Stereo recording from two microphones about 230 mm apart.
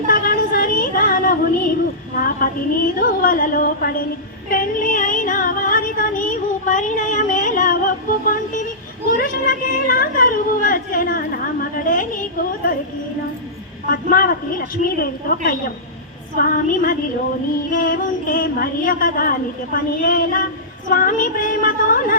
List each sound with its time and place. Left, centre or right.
0.1 s child singing: left
2.2 s a woman's voice: left
4.4 s music: left
6.7 s a sound: left
9.0 s a woman's voice: left
13.9 s a woman's voice: left
16.4 s a woman's voice: left